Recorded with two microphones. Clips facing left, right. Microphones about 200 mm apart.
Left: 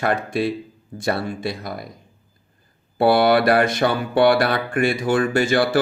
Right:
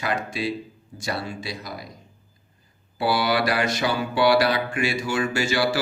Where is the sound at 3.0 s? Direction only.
55° left (ahead or behind).